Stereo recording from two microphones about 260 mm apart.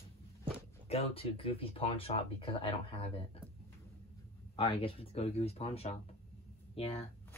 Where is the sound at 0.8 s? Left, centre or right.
Left.